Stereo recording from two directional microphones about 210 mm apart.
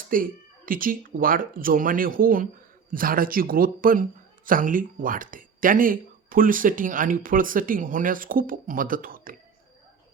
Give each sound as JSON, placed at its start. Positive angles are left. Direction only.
{"t": 0.1, "sound": "speech", "side_deg": -40}